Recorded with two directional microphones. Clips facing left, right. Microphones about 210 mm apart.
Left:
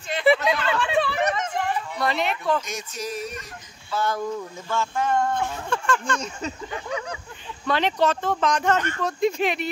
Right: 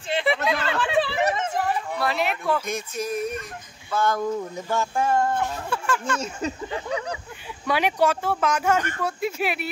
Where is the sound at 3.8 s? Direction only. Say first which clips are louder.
Right 2 dB; 50° right (ahead or behind).